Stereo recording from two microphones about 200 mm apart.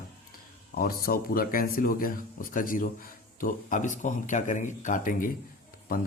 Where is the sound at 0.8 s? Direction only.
45° left (ahead or behind).